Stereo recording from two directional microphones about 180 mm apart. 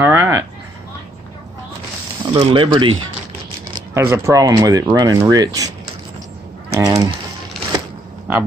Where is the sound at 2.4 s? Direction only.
30° right (ahead or behind).